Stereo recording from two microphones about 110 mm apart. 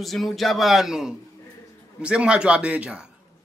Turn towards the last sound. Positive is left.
turn(degrees=-10)  # may be behind; listen again after turning